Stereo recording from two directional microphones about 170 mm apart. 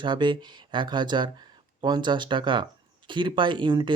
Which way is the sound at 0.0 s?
25° right (ahead or behind).